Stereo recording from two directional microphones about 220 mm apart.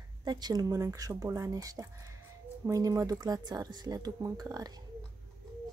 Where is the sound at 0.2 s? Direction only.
20° right (ahead or behind).